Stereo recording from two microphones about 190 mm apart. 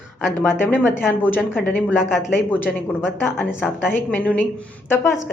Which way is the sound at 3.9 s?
10° left (ahead or behind).